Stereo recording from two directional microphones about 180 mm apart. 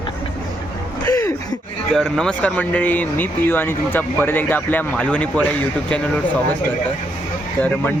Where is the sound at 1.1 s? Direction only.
15° left (ahead or behind).